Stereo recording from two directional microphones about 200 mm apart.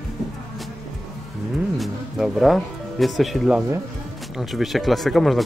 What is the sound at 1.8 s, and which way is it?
Speech, centre (ahead or behind).